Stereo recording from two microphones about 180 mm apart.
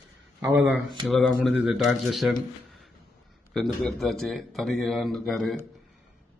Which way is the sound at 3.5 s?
Centre (ahead or behind).